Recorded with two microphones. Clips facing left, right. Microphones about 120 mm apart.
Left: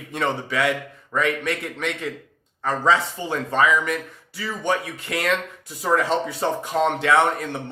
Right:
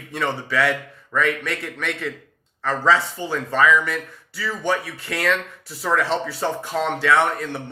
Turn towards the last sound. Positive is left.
turn(degrees=25)  # may be behind; listen again after turning